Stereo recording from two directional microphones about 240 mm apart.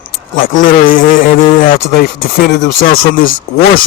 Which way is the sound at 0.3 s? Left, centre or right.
Left.